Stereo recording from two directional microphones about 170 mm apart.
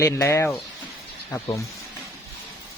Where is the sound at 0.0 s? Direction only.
15° left (ahead or behind).